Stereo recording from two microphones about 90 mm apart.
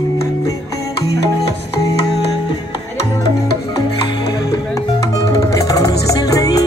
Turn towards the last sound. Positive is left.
turn(degrees=45)  # may be behind; listen again after turning